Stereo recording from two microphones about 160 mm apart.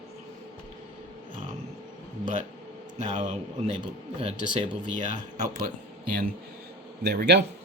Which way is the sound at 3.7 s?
35° right (ahead or behind).